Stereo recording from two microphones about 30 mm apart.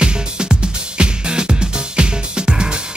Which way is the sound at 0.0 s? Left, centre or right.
Right.